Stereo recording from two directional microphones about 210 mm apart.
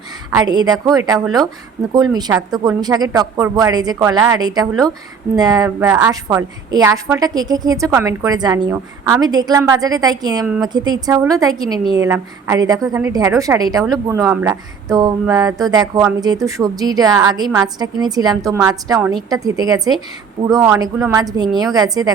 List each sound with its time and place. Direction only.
0.3 s a woman's voice: 15° right (ahead or behind)